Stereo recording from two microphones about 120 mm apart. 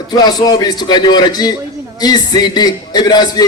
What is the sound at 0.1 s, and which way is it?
A man's voice, 35° left (ahead or behind).